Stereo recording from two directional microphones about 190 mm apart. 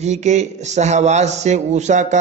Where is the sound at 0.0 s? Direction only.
35° right (ahead or behind).